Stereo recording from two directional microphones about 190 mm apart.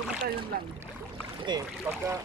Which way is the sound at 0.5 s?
50° right (ahead or behind).